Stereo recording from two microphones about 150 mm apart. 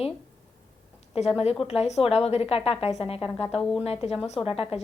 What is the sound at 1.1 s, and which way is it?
A woman's voice, 40° left (ahead or behind).